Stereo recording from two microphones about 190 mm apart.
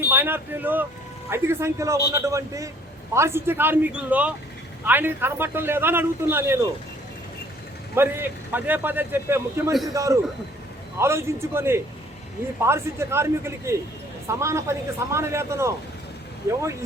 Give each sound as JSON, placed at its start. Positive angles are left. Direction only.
{"t": 0.1, "sound": "a man's voice", "side_deg": -10}
{"t": 7.9, "sound": "a man's voice", "side_deg": -10}